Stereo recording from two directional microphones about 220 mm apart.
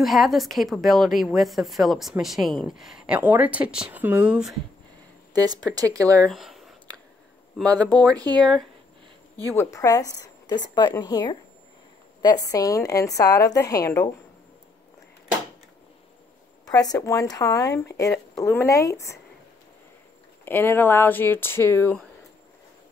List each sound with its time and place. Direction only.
0.0 s a woman's voice: centre (ahead or behind)
5.3 s speech: 20° right (ahead or behind)
6.2 s speech: centre (ahead or behind)
7.9 s speech: 15° right (ahead or behind)
9.6 s speech: 15° left (ahead or behind)
16.9 s speech: 15° left (ahead or behind)
20.4 s speech: 10° left (ahead or behind)